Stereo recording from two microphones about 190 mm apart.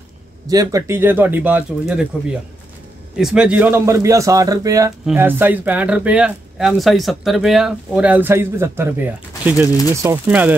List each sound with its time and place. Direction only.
0.5 s speech: 20° right (ahead or behind)